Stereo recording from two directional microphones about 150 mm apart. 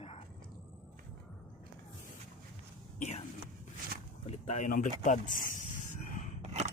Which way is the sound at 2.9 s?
50° left (ahead or behind).